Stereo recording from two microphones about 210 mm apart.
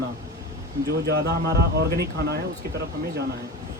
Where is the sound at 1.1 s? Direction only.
50° right (ahead or behind).